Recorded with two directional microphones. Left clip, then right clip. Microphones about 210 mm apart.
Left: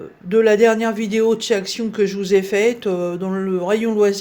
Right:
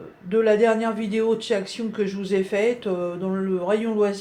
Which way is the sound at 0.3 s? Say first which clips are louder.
Left 5 dB; 40° left (ahead or behind).